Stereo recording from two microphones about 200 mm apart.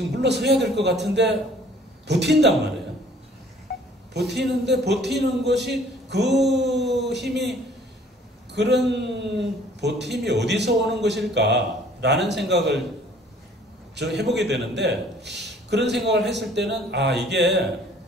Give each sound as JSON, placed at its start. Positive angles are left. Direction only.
{"t": 0.1, "sound": "a man's voice", "side_deg": -60}
{"t": 3.7, "sound": "a sound", "side_deg": 50}
{"t": 4.1, "sound": "a man's voice", "side_deg": -55}
{"t": 8.5, "sound": "a man's voice", "side_deg": -60}
{"t": 13.9, "sound": "a man's voice", "side_deg": -60}